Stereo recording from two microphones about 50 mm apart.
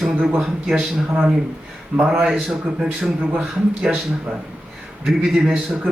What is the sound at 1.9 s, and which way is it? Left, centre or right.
Speech, right.